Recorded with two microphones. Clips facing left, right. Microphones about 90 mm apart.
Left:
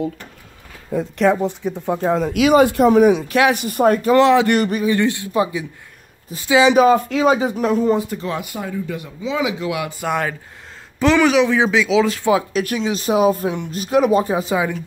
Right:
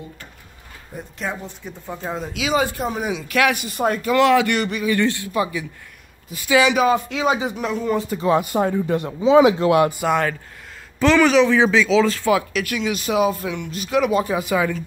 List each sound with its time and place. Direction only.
0.9 s speech: 70° left (ahead or behind); by 3.3 s 55° left (ahead or behind)
3.3 s speech: 25° left (ahead or behind)
3.5 s speech: 45° left (ahead or behind)
4.2 s speech: 25° left (ahead or behind)
4.5 s speech: 40° left (ahead or behind)
4.8 s speech: 20° left (ahead or behind); by 7.9 s 40° left (ahead or behind)
8.2 s speech: 25° right (ahead or behind)
8.5 s speech: 50° right (ahead or behind)
9.9 s speech: centre (ahead or behind)
11.0 s speech: 15° left (ahead or behind)
12.5 s speech: 35° left (ahead or behind)